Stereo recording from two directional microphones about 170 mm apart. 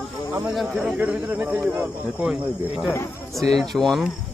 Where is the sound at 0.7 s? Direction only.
10° right (ahead or behind).